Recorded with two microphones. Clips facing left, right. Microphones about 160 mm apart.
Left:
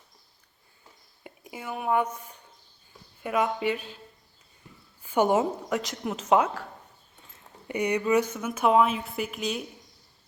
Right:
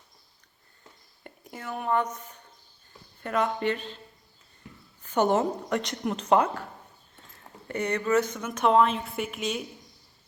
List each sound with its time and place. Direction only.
1.2 s speech: 5° left (ahead or behind)
5.0 s speech: 10° left (ahead or behind)
7.7 s speech: 15° left (ahead or behind)